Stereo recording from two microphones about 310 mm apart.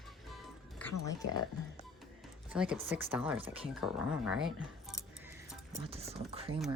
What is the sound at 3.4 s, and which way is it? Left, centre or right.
Speech, centre.